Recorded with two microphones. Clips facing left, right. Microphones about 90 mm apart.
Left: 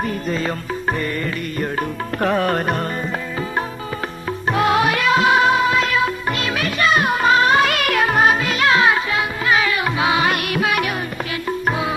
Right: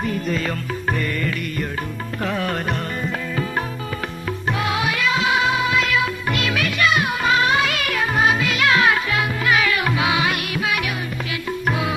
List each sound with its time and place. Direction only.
0.0 s music: 35° left (ahead or behind)
2.2 s music: 45° left (ahead or behind)
4.4 s music: 45° left (ahead or behind)
11.4 s music: 30° left (ahead or behind)